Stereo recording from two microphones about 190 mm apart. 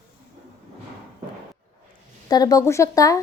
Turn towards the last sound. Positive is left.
turn(degrees=15)  # may be behind; listen again after turning